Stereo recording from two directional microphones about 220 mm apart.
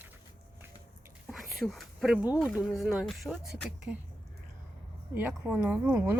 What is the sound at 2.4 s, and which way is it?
Speech, centre (ahead or behind).